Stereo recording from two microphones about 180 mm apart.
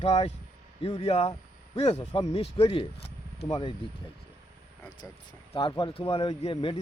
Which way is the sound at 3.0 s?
35° left (ahead or behind).